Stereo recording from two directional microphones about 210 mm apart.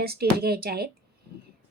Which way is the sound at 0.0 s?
50° right (ahead or behind).